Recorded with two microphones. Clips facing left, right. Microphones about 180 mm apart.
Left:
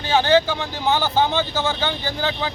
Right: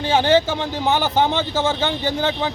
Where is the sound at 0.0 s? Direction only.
25° right (ahead or behind).